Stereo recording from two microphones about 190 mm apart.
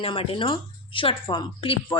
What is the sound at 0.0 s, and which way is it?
Speech, 30° left (ahead or behind).